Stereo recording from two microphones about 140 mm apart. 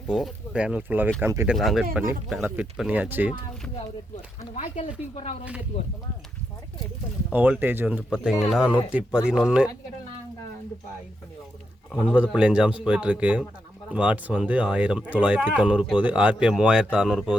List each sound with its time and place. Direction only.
0.1 s speech: centre (ahead or behind); by 1.5 s 20° right (ahead or behind)
1.5 s speech: centre (ahead or behind)
4.5 s speech: 55° left (ahead or behind)
7.3 s speech: 10° right (ahead or behind)
11.9 s speech: 10° right (ahead or behind)